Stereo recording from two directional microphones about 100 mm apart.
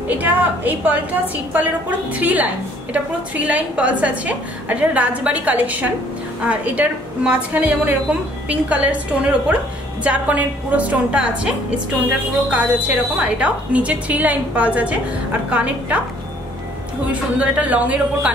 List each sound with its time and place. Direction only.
0.2 s a woman's voice: 15° right (ahead or behind)
17.1 s a woman's voice: 15° right (ahead or behind)